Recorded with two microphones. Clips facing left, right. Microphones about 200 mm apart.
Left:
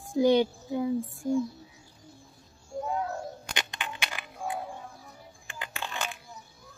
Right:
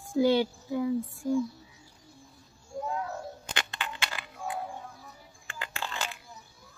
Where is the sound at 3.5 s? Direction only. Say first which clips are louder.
Even; 15° left (ahead or behind).